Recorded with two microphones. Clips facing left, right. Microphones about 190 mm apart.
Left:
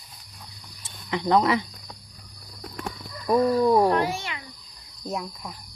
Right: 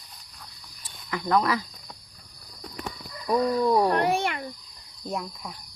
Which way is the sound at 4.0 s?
60° right (ahead or behind).